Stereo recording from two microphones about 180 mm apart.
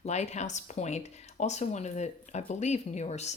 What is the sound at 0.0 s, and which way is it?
Speech, 40° left (ahead or behind).